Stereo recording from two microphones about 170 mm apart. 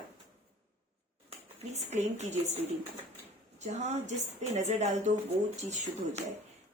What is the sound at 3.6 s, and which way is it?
A woman's voice, 40° right (ahead or behind).